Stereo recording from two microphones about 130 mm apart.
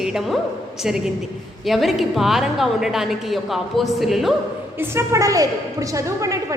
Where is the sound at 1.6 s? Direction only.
Centre (ahead or behind).